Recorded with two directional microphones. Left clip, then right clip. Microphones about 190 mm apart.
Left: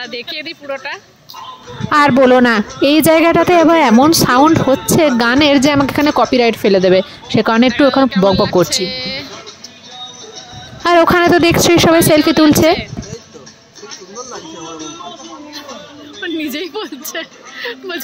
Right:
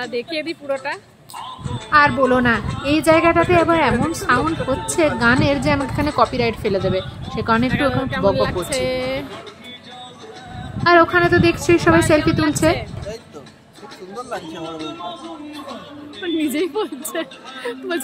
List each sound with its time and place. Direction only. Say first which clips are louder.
0.0 s speech: even; 5° right (ahead or behind)
1.9 s speech: left 5 dB; 55° left (ahead or behind)
8.2 s speech: left 2 dB; 10° right (ahead or behind)
8.5 s speech: left 9 dB; 40° left (ahead or behind)
8.8 s speech: even; 15° right (ahead or behind)
10.8 s speech: left 3 dB; 50° left (ahead or behind)
16.2 s a woman's voice: even; 5° right (ahead or behind)